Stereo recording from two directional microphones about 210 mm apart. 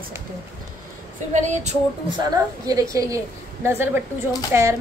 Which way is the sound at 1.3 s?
35° right (ahead or behind).